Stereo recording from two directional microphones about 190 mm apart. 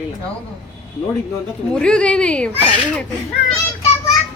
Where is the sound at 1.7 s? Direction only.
5° left (ahead or behind).